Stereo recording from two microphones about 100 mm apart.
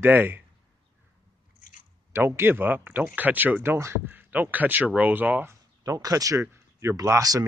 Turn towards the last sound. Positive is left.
turn(degrees=-35)  # may be behind; listen again after turning